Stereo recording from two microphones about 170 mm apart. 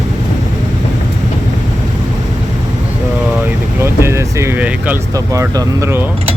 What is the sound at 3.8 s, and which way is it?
Vehicle, 15° right (ahead or behind).